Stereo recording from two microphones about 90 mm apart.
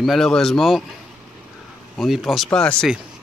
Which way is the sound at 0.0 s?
Centre (ahead or behind).